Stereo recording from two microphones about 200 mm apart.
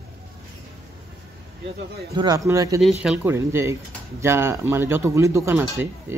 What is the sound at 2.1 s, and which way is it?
Speech, 20° right (ahead or behind).